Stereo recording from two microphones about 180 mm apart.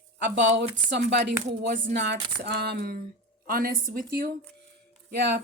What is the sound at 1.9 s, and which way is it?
Speech, 65° right (ahead or behind).